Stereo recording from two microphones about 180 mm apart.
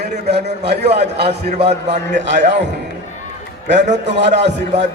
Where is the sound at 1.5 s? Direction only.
35° right (ahead or behind).